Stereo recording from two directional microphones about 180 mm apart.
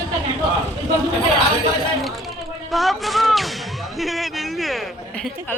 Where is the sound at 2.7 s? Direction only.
Centre (ahead or behind).